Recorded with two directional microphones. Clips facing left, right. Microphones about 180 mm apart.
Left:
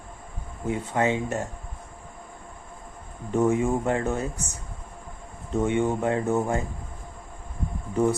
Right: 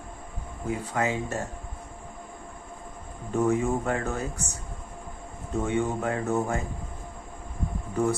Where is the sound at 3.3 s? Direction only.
20° left (ahead or behind).